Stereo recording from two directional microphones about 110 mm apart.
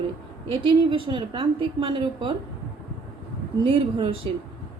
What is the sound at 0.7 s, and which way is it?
A woman's voice, 50° right (ahead or behind).